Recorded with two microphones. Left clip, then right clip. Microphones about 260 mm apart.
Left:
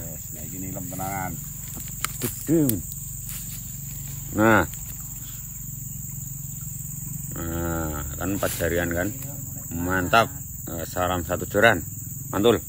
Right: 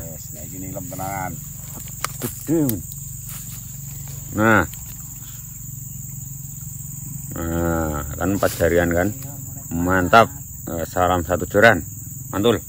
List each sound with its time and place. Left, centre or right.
0.6 s speech: centre
4.4 s speech: right
7.3 s wild animals: centre
9.7 s speech: centre